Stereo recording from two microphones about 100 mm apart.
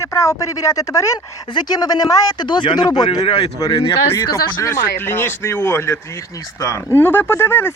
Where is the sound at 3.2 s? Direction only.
90° left.